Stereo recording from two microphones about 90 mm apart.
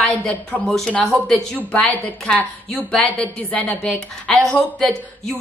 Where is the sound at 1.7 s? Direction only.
20° left (ahead or behind).